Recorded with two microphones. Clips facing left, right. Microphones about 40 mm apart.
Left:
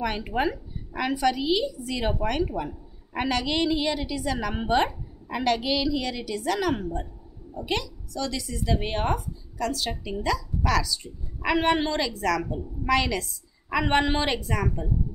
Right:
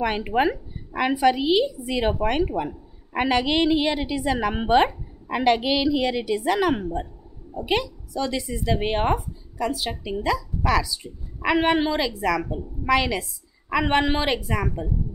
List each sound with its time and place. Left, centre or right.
0.0 s a woman's voice: centre